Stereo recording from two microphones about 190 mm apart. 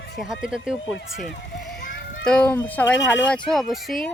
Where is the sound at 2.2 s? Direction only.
5° left (ahead or behind).